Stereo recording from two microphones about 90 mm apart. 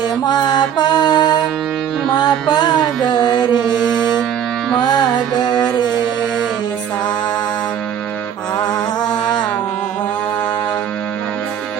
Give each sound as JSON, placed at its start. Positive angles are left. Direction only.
{"t": 0.3, "sound": "music", "side_deg": 50}
{"t": 5.5, "sound": "music", "side_deg": 10}